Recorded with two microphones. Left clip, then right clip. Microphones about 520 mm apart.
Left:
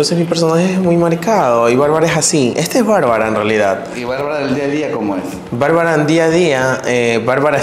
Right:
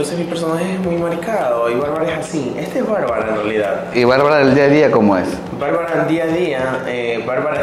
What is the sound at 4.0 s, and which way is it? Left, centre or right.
Speech, right.